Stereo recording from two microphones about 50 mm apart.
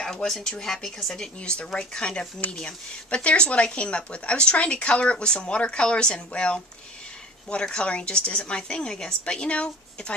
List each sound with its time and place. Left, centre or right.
0.0 s speech: centre